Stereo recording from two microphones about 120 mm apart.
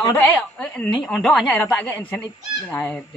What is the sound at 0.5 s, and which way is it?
Speech, 10° left (ahead or behind).